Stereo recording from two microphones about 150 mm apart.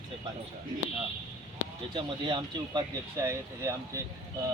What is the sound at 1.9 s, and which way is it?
Speech, 30° right (ahead or behind).